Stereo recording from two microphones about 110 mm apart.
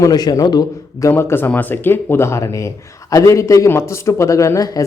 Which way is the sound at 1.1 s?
20° left (ahead or behind).